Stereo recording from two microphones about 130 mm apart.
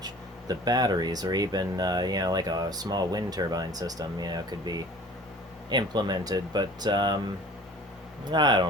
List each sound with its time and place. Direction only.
0.0 s speech: 30° right (ahead or behind)
8.2 s speech: 35° right (ahead or behind)